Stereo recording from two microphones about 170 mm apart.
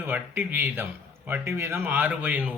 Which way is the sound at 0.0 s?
10° right (ahead or behind).